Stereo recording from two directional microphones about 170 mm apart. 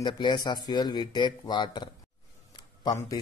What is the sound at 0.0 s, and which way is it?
Speech, 25° left (ahead or behind).